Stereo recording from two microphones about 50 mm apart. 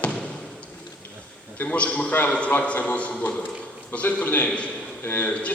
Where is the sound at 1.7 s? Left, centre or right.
Left.